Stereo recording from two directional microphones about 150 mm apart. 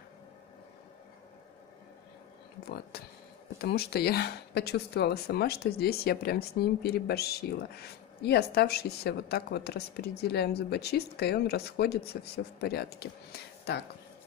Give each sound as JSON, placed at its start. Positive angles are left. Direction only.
{"t": 2.9, "sound": "speech", "side_deg": 90}